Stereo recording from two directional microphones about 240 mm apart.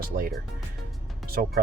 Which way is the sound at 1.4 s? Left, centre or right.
Right.